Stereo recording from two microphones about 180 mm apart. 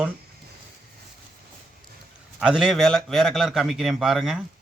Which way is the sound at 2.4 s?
5° right (ahead or behind).